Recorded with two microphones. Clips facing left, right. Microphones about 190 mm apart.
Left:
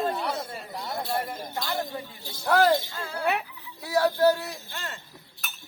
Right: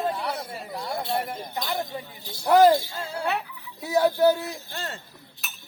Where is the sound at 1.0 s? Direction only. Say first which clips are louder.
Right 1 dB; 25° right (ahead or behind).